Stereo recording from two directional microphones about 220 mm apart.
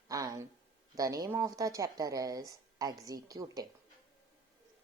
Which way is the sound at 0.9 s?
15° right (ahead or behind).